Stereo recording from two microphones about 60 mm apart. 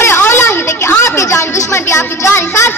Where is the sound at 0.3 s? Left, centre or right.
Left.